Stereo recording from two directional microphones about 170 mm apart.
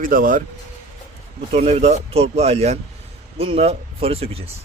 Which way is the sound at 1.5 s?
40° right (ahead or behind).